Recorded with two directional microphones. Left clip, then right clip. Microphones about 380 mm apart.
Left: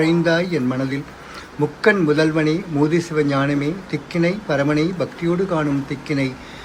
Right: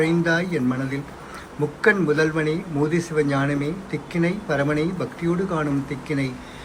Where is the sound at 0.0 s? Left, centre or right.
Centre.